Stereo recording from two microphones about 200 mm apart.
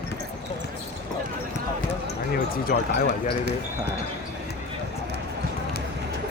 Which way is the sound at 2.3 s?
50° left (ahead or behind).